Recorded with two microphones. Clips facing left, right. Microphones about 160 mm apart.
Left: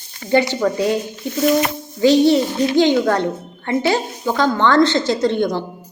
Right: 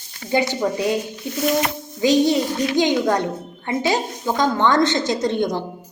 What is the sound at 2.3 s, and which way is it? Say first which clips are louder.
Speech: left 4 dB; 30° left (ahead or behind).